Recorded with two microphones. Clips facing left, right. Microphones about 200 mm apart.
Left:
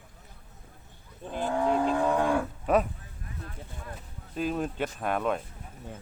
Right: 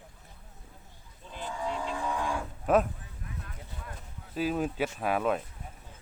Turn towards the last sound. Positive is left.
turn(degrees=-5)  # may be behind; listen again after turning